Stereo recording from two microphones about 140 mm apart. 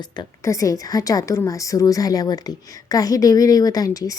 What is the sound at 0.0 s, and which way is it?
Speech, 25° left (ahead or behind).